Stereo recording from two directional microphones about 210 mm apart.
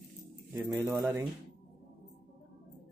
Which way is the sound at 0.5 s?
15° right (ahead or behind).